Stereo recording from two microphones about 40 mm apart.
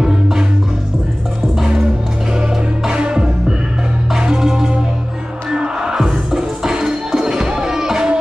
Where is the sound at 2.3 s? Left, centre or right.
Centre.